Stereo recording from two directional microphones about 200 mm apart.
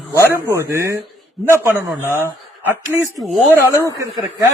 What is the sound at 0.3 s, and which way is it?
Speech, 10° right (ahead or behind).